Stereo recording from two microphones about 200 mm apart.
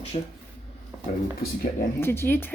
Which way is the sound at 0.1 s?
35° left (ahead or behind).